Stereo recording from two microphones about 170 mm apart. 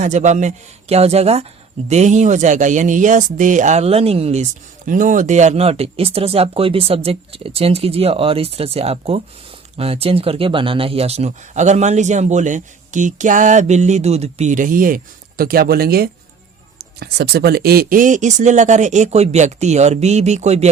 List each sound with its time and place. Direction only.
0.0 s speech: 45° right (ahead or behind)
4.9 s speech: 50° right (ahead or behind)